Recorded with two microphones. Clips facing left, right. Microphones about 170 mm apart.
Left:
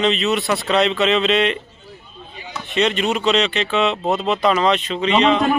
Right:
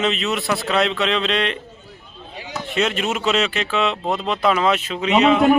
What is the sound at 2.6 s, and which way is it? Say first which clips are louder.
Speech: left 3 dB; centre (ahead or behind).